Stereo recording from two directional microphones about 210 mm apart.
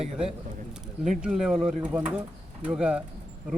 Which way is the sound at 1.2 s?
5° right (ahead or behind).